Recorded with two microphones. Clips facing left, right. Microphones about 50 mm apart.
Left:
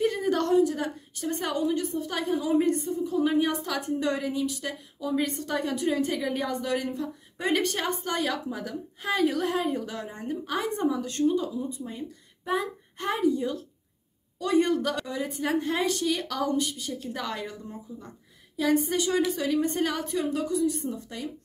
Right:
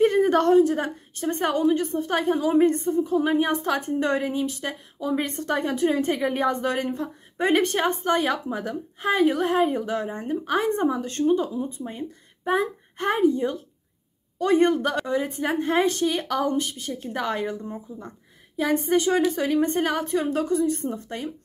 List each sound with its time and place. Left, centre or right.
0.0 s a woman's voice: right